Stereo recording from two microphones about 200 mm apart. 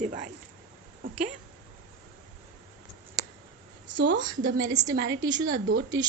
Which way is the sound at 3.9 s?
65° right (ahead or behind).